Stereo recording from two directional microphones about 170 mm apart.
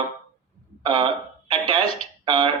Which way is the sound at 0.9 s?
30° right (ahead or behind).